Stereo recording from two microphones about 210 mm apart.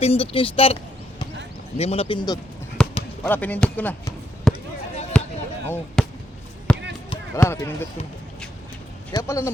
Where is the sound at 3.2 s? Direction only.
5° left (ahead or behind).